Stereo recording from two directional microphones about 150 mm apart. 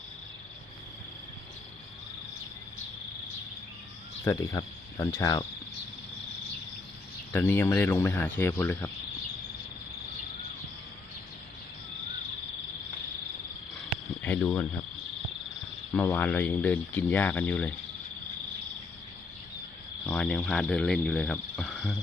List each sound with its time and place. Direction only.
4.2 s cricket: 20° left (ahead or behind)
7.3 s speech: 15° left (ahead or behind)
14.2 s speech: 10° left (ahead or behind)
15.9 s speech: 10° left (ahead or behind)
20.1 s speech: 10° left (ahead or behind)